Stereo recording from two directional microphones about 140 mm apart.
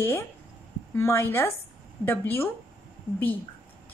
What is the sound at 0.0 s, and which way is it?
A woman's voice, 15° left (ahead or behind).